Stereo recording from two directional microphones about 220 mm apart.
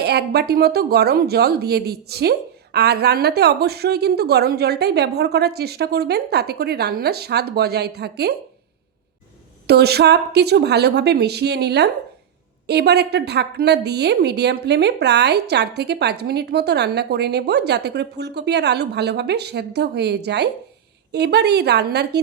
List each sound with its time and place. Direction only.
0.0 s a woman's voice: 45° right (ahead or behind)
9.6 s a woman's voice: 45° right (ahead or behind)